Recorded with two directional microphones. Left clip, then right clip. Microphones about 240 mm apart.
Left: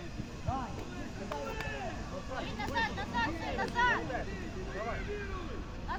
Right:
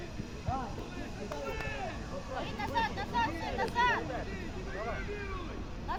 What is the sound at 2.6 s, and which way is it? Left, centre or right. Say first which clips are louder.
Speech: right 1 dB; centre.